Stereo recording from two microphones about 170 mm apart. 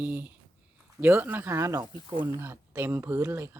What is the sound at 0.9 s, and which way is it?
Speech, 10° right (ahead or behind).